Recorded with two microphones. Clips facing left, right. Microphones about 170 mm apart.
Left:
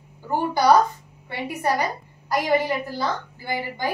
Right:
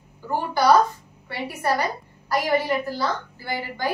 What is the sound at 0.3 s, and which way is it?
A woman's voice, 15° left (ahead or behind).